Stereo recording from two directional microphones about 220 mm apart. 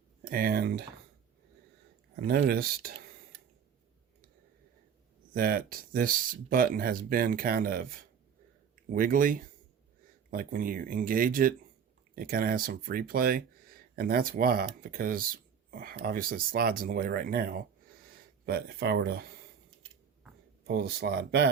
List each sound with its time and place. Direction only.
0.3 s speech: 40° right (ahead or behind)
2.2 s speech: 45° right (ahead or behind)
5.3 s speech: 40° right (ahead or behind)
20.7 s speech: 45° right (ahead or behind)